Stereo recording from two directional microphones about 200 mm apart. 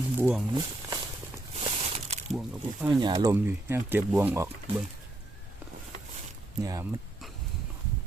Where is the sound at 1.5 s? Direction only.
30° right (ahead or behind).